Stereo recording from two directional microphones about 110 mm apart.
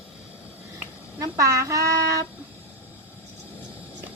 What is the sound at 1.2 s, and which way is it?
A woman's voice, 30° right (ahead or behind).